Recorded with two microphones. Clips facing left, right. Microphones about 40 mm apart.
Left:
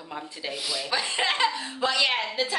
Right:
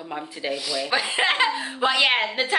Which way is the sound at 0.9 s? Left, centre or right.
Right.